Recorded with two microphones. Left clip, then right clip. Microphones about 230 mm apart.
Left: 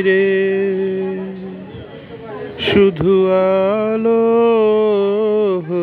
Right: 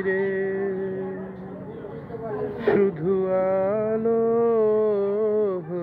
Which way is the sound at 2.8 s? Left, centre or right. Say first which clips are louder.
Left 10 dB; left.